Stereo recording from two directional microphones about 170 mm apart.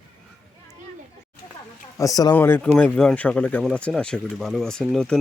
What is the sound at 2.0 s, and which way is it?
Speech, 20° left (ahead or behind).